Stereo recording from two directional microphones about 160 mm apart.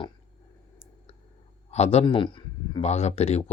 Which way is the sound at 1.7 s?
40° left (ahead or behind).